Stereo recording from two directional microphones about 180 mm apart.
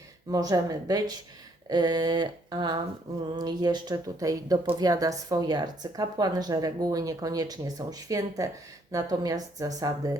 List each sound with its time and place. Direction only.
0.3 s speech: 20° right (ahead or behind)